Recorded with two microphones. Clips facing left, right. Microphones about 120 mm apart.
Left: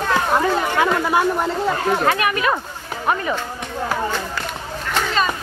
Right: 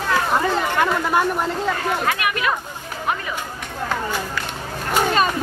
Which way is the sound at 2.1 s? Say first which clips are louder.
Left 3 dB; 35° left (ahead or behind).